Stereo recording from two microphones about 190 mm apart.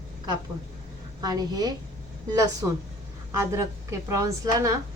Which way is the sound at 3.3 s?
15° right (ahead or behind).